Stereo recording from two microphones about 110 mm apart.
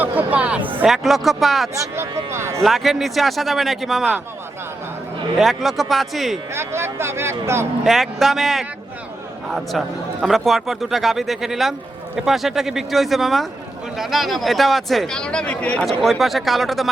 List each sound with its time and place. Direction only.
0.0 s a sound: 15° right (ahead or behind)
0.9 s speech: centre (ahead or behind)
1.7 s speech: 25° right (ahead or behind)
2.6 s speech: centre (ahead or behind)
5.4 s speech: centre (ahead or behind)
6.5 s speech: 25° right (ahead or behind)
7.9 s speech: centre (ahead or behind)